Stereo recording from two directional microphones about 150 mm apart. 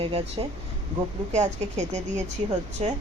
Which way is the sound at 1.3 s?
50° right (ahead or behind).